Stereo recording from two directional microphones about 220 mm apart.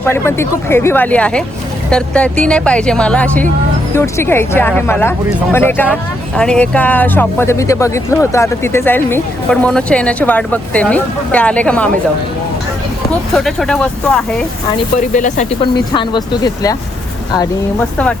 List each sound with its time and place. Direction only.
0.0 s speech: 10° left (ahead or behind)
13.3 s speech: centre (ahead or behind)
15.1 s speech: 35° left (ahead or behind)
15.9 s speech: 20° left (ahead or behind)